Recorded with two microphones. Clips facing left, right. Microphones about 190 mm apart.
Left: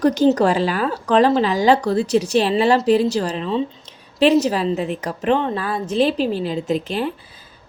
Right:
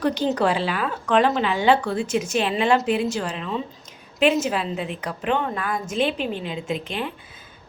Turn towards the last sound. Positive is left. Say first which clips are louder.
# left 6 dB
turn(degrees=40)  # may be behind; listen again after turning